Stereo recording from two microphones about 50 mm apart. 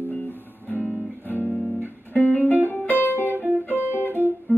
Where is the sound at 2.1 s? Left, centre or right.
Left.